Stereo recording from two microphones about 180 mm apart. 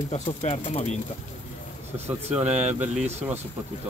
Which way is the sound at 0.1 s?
35° left (ahead or behind).